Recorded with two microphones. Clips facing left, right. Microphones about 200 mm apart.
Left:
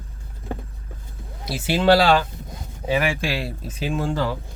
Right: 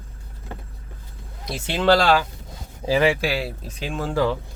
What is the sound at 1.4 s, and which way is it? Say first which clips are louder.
Speech: left 2 dB; 5° left (ahead or behind).